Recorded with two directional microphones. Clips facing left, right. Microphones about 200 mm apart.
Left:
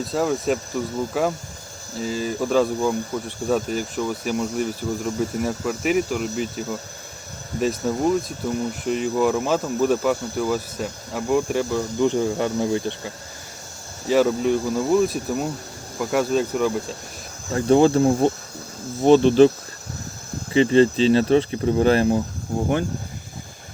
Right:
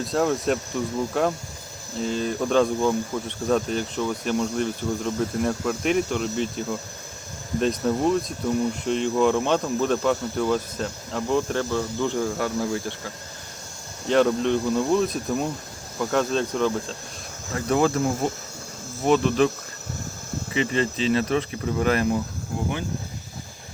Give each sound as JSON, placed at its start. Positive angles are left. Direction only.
{"t": 0.0, "sound": "speech", "side_deg": 0}
{"t": 14.1, "sound": "speech", "side_deg": 5}
{"t": 17.5, "sound": "speech", "side_deg": 30}
{"t": 20.5, "sound": "speech", "side_deg": 30}